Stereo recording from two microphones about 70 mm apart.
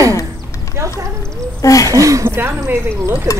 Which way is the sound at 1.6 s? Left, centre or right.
Left.